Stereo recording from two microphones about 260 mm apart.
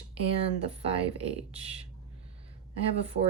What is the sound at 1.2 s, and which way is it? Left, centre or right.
Speech, right.